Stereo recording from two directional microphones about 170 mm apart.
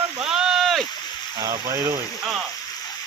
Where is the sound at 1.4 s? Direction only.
15° right (ahead or behind).